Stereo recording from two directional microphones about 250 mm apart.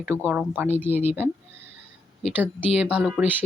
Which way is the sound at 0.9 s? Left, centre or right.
Left.